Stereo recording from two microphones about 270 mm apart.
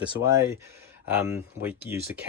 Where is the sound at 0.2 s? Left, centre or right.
Centre.